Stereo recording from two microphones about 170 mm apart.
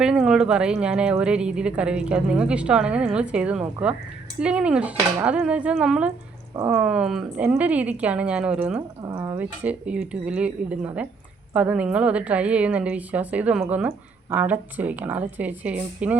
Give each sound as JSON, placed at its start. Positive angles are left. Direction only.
{"t": 0.0, "sound": "a woman's voice", "side_deg": -5}
{"t": 6.6, "sound": "a woman's voice", "side_deg": -15}
{"t": 6.8, "sound": "a woman's voice", "side_deg": -5}